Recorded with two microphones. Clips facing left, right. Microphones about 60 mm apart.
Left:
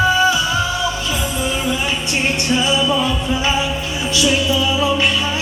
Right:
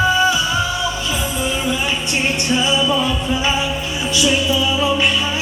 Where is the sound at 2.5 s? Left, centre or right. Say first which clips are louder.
Even; centre.